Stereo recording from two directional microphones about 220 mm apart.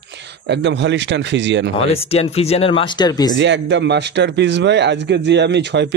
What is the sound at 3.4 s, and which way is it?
Speech, 55° right (ahead or behind).